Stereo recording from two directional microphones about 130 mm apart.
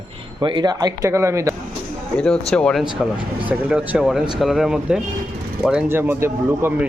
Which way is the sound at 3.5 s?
10° right (ahead or behind).